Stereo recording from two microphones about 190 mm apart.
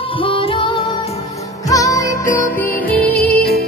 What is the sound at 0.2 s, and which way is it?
Music, 30° left (ahead or behind).